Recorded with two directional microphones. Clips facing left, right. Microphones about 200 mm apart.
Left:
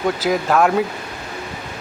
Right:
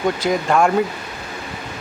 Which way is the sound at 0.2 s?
5° left (ahead or behind).